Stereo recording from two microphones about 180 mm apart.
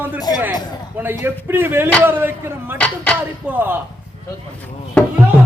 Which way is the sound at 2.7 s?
5° left (ahead or behind).